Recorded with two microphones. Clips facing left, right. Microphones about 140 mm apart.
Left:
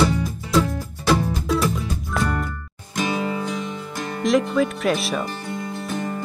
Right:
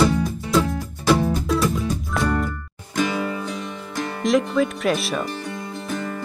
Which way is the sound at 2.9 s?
20° left (ahead or behind).